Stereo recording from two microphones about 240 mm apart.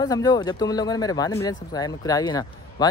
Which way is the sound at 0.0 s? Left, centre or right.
Centre.